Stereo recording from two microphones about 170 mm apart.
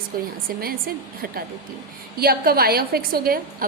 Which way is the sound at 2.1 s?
65° right (ahead or behind).